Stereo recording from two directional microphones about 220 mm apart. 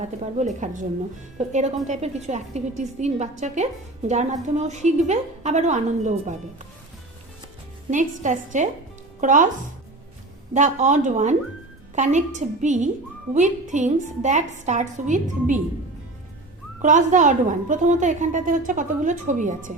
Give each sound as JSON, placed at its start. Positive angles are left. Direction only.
{"t": 0.6, "sound": "a woman's voice", "side_deg": -35}
{"t": 7.9, "sound": "a woman's voice", "side_deg": -35}
{"t": 10.5, "sound": "a woman's voice", "side_deg": -35}
{"t": 16.8, "sound": "a woman's voice", "side_deg": -35}